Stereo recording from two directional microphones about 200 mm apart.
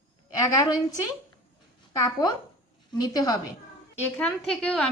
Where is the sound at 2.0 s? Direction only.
20° left (ahead or behind).